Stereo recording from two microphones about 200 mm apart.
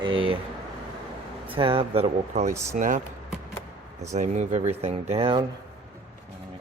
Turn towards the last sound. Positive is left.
turn(degrees=-25)  # may be behind; listen again after turning